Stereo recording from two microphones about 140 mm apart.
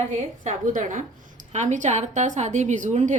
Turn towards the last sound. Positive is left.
turn(degrees=-60)  # may be behind; listen again after turning